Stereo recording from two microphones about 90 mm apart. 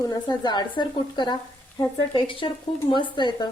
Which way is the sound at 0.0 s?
50° left (ahead or behind).